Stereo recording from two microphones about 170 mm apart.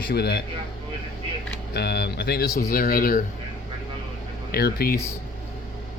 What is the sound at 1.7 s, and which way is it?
Speech, 70° left (ahead or behind).